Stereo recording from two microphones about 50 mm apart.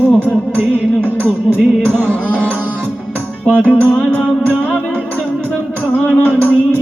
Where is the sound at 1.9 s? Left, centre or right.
Left.